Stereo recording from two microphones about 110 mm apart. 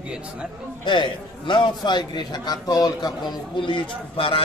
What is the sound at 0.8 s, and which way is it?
A man's voice, 45° left (ahead or behind).